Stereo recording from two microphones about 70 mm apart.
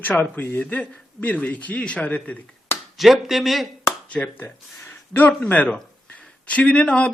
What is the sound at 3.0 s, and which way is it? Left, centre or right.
Speech, centre.